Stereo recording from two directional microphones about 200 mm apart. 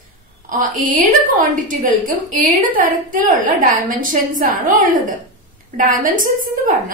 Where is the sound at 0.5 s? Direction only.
40° right (ahead or behind).